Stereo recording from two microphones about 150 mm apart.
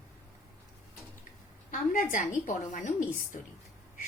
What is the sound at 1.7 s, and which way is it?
Speech, 60° left (ahead or behind).